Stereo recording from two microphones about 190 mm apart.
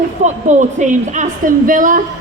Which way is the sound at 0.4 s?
40° right (ahead or behind).